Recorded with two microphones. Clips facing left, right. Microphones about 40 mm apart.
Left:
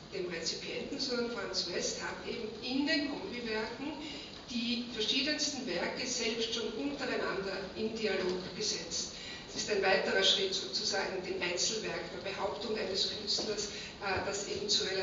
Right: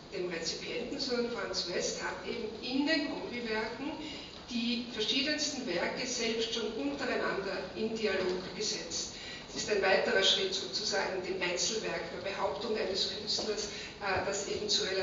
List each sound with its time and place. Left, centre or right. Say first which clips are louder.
0.3 s a man's voice: right 2 dB; centre
9.7 s a man's voice: right 2 dB; centre